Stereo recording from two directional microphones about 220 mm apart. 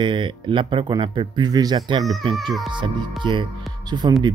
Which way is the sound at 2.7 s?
20° right (ahead or behind).